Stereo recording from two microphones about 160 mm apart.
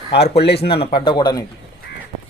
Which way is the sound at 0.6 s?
35° left (ahead or behind).